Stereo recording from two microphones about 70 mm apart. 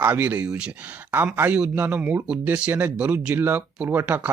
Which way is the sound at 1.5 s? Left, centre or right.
Centre.